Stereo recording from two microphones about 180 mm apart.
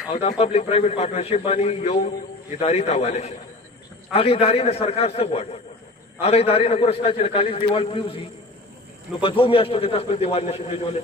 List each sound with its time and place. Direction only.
0.1 s a man's voice: 35° left (ahead or behind)
9.2 s a man's voice: 30° left (ahead or behind)